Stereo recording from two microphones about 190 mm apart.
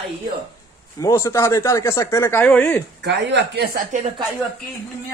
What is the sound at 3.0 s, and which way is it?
Speech, 65° right (ahead or behind).